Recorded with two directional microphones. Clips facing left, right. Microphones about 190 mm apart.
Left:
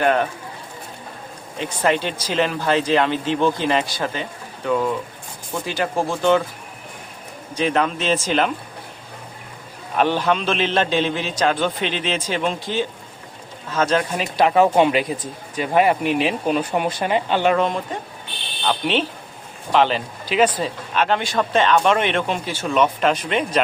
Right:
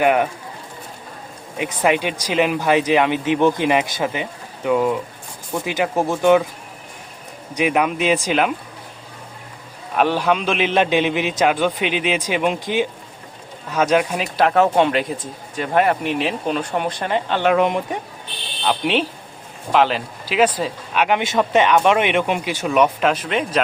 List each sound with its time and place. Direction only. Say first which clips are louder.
0.0 s speech: right 2 dB; 15° right (ahead or behind)
1.5 s speech: right 2 dB; 15° right (ahead or behind)
7.5 s speech: right 2 dB; 10° right (ahead or behind)
10.0 s speech: right 1 dB; 5° right (ahead or behind)
17.6 s speech: right 3 dB; 15° right (ahead or behind)
23.0 s speech: even; 5° right (ahead or behind)